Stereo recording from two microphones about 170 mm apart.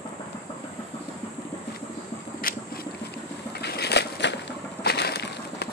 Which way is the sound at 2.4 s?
55° left (ahead or behind).